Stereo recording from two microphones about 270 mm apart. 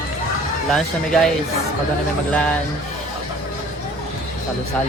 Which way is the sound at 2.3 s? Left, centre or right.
Centre.